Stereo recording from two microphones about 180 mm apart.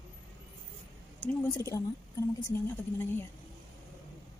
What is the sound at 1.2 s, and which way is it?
A woman's voice, 15° left (ahead or behind).